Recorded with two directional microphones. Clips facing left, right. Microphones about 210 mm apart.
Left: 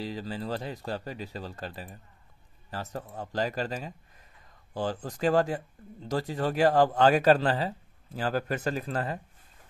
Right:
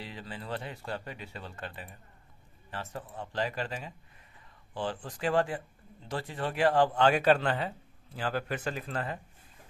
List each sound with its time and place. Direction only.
0.0 s speech: 40° left (ahead or behind)